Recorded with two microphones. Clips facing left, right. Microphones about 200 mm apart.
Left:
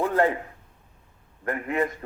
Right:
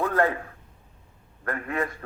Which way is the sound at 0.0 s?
15° left (ahead or behind).